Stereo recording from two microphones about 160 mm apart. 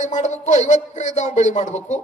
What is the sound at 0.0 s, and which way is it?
Speech, 50° left (ahead or behind).